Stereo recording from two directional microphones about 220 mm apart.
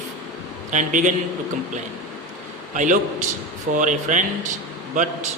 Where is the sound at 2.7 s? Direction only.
35° right (ahead or behind).